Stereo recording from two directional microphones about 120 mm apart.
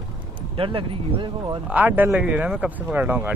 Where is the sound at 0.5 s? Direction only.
50° right (ahead or behind).